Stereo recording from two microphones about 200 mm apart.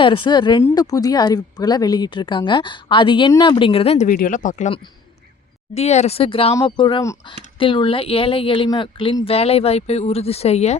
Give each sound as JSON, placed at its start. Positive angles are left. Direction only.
{"t": 0.0, "sound": "speech", "side_deg": 25}